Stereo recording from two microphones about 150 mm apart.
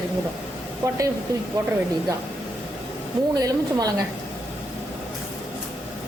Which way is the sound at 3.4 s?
25° right (ahead or behind).